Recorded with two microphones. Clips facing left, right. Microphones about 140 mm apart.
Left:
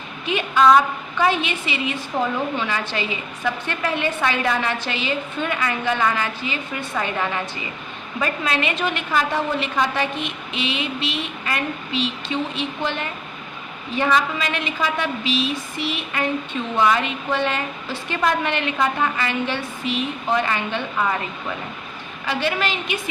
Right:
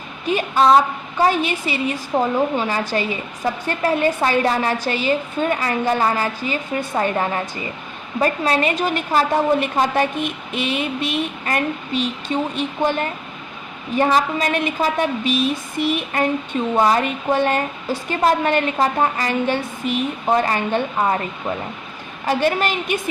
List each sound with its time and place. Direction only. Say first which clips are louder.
0.3 s a woman's voice: right 1 dB; 40° right (ahead or behind)